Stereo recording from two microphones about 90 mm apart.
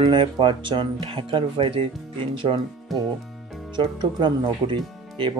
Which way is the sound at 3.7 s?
60° right (ahead or behind).